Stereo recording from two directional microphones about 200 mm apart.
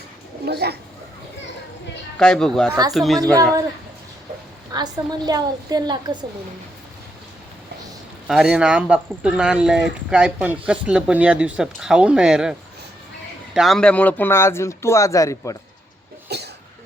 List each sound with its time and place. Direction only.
0.4 s speech: 55° right (ahead or behind)
2.1 s speech: 5° left (ahead or behind)
3.3 s a man's voice: 15° right (ahead or behind)
4.7 s a woman's voice: 20° right (ahead or behind)
8.3 s speech: 5° right (ahead or behind); by 15.5 s 15° left (ahead or behind)
16.3 s cough: 55° right (ahead or behind)